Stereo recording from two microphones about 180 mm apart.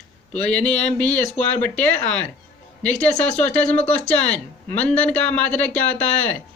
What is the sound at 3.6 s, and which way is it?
Speech, 40° left (ahead or behind).